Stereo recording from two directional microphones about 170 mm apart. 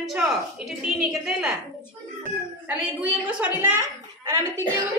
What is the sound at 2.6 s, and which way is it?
A woman's voice, 10° right (ahead or behind).